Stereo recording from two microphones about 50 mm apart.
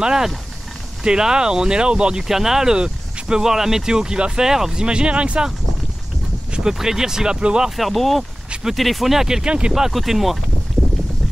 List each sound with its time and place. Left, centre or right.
0.0 s speech: centre
4.8 s speech: centre
6.5 s speech: centre
7.7 s speech: centre